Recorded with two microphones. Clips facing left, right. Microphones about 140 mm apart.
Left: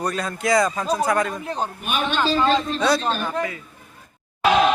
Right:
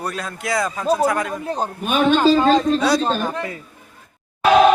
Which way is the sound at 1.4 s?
40° right (ahead or behind).